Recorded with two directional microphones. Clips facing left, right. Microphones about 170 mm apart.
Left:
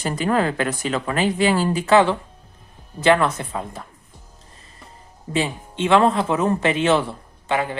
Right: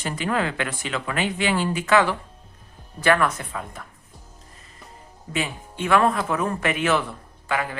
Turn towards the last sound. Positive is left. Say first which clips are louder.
# left 4 dB
turn(degrees=25)  # may be behind; listen again after turning